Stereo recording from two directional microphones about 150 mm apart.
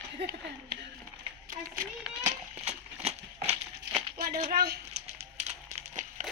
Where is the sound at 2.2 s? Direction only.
50° right (ahead or behind).